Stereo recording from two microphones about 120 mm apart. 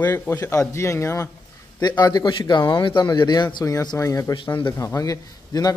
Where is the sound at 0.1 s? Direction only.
15° left (ahead or behind).